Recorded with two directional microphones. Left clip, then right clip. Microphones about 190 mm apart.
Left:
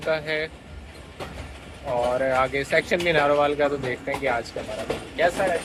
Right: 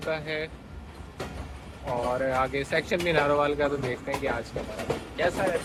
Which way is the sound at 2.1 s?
5° right (ahead or behind).